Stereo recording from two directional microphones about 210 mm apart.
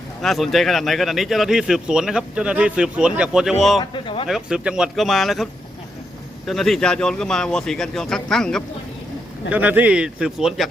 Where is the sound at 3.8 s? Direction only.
25° left (ahead or behind).